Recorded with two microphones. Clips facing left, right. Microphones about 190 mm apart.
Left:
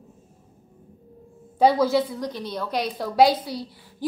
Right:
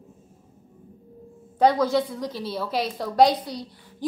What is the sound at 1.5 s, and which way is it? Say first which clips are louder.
A woman's voice: left 1 dB; 10° left (ahead or behind).